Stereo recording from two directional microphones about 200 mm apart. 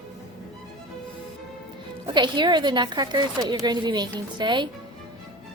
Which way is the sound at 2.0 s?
25° right (ahead or behind).